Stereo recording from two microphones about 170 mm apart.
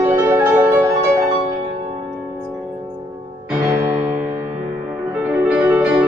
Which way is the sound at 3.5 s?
10° right (ahead or behind).